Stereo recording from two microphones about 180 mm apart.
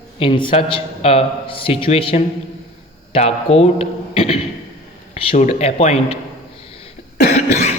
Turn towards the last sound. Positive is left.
turn(degrees=40)  # may be behind; listen again after turning